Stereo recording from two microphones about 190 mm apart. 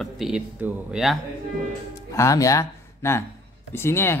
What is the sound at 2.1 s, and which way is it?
Speech, 15° left (ahead or behind).